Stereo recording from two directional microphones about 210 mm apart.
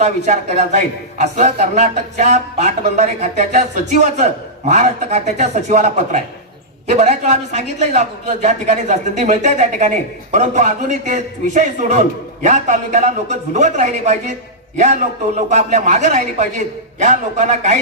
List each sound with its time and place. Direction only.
0.0 s a man's voice: 35° right (ahead or behind)
15.4 s a man's voice: 35° right (ahead or behind)